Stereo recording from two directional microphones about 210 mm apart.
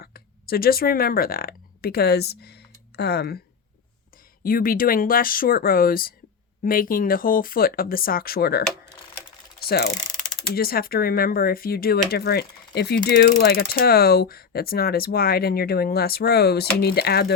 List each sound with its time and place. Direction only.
0.0 s speech: 45° left (ahead or behind)
4.4 s speech: 45° left (ahead or behind)
9.6 s ratchet: 50° left (ahead or behind)
10.5 s speech: 45° left (ahead or behind)